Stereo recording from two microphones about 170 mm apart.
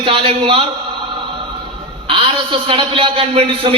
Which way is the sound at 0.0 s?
35° right (ahead or behind).